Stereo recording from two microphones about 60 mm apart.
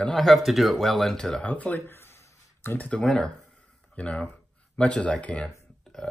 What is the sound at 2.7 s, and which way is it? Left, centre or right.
Speech, left.